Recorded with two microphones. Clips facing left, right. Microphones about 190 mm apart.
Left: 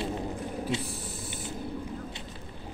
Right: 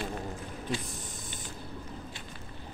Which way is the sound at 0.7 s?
20° left (ahead or behind).